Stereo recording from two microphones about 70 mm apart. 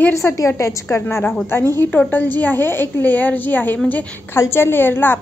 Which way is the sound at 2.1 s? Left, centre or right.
Left.